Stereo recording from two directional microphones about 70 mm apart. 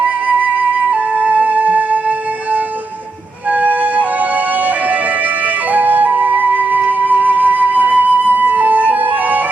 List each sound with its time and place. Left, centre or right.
0.3 s flute: centre
3.5 s music: right
5.7 s flute: right